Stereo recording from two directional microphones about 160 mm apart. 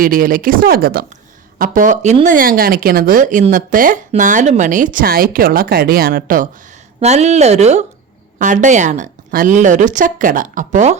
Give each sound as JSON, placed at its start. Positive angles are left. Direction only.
{"t": 0.0, "sound": "speech", "side_deg": -60}
{"t": 1.5, "sound": "speech", "side_deg": -60}
{"t": 7.0, "sound": "a woman's voice", "side_deg": -45}